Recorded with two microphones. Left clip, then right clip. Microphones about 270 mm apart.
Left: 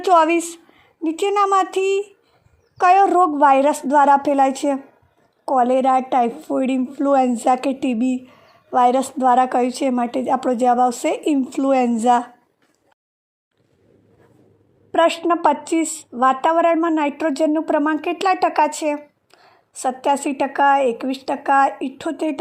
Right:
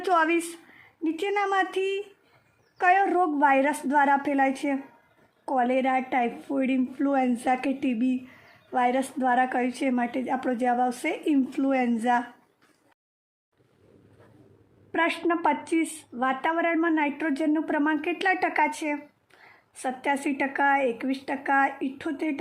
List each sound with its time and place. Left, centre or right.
0.0 s a woman's voice: centre
14.9 s a woman's voice: left